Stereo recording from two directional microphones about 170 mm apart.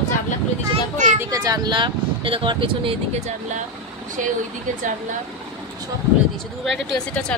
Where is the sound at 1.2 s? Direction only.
20° right (ahead or behind).